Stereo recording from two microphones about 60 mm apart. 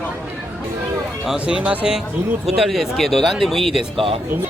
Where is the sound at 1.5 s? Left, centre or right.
Right.